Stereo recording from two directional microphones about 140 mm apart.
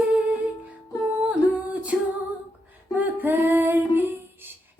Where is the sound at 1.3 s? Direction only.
10° right (ahead or behind).